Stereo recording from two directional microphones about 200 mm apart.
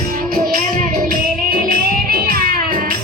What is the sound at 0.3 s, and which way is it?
Music, 45° right (ahead or behind).